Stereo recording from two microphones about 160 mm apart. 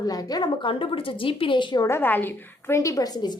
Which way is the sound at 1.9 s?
15° left (ahead or behind).